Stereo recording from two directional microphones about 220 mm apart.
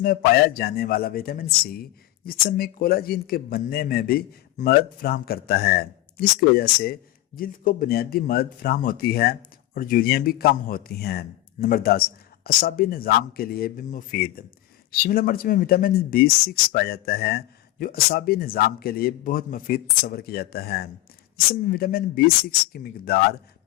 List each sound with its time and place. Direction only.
0.0 s a man's voice: 40° left (ahead or behind)